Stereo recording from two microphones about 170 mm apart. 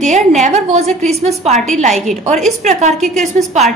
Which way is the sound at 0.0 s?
45° right (ahead or behind).